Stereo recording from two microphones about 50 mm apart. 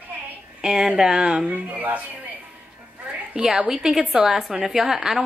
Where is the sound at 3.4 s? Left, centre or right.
Centre.